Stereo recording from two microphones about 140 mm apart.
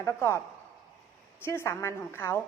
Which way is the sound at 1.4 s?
15° left (ahead or behind).